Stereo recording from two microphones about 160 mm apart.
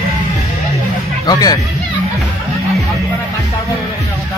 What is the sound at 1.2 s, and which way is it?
Speech, 25° left (ahead or behind).